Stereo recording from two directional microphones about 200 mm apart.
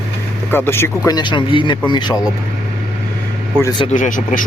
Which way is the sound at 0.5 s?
10° left (ahead or behind).